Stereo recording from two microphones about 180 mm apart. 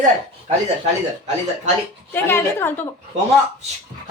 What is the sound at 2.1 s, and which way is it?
Speech, 10° left (ahead or behind).